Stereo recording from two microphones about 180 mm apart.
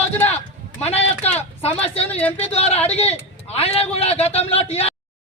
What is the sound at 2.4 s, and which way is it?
A man's voice, 35° left (ahead or behind).